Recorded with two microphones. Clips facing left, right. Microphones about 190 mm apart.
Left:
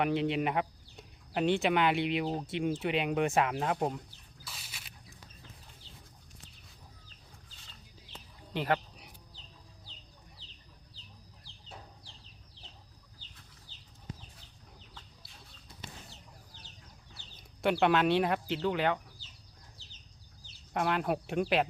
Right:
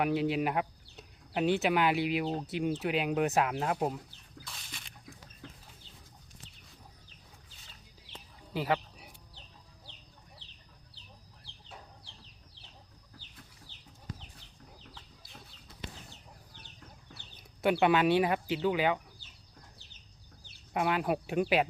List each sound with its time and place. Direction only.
0.0 s speech: 5° right (ahead or behind)
4.4 s a sound: 5° left (ahead or behind)
8.5 s a sound: 5° right (ahead or behind)
17.1 s chicken: 55° right (ahead or behind)
17.6 s speech: 5° right (ahead or behind)
20.7 s speech: 5° right (ahead or behind)